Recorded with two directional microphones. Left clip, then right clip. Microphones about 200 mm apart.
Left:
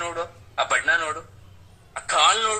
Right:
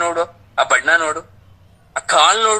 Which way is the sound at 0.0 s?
30° right (ahead or behind).